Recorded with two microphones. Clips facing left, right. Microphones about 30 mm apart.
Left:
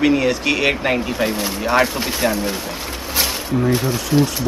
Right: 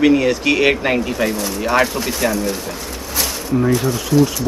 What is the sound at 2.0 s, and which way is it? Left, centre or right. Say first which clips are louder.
Speech: right 1 dB; left.